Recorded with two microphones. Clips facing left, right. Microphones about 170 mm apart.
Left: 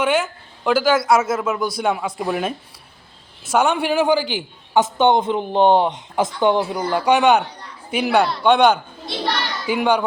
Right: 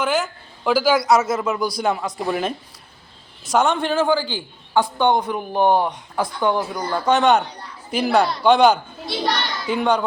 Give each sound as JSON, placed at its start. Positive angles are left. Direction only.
{"t": 0.0, "sound": "a man's voice", "side_deg": 5}